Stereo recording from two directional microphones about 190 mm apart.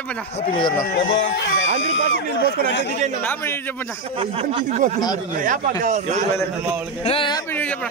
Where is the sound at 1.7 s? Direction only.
75° left (ahead or behind).